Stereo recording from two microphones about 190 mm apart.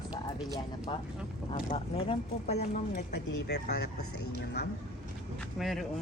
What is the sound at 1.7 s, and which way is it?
Speech, 30° left (ahead or behind).